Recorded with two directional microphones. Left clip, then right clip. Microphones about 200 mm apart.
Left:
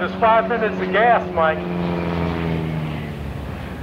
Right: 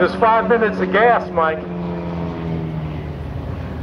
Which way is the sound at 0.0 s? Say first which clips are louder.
Right 2 dB; 30° left (ahead or behind).